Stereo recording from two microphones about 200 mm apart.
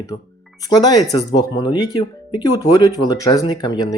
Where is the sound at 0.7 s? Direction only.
20° left (ahead or behind).